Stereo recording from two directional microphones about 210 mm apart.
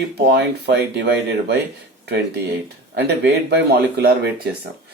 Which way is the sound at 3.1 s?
55° right (ahead or behind).